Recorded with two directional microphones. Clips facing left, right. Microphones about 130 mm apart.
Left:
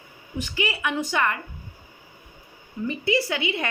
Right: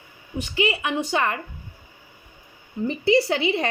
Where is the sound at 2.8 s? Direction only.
30° right (ahead or behind).